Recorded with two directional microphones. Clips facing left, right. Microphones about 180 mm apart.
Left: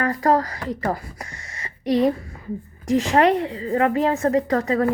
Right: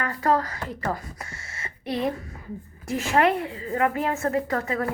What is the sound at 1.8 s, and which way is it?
Speech, 90° left.